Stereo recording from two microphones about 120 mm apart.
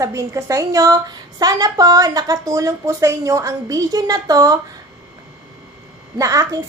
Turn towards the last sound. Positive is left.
turn(degrees=-25)  # may be behind; listen again after turning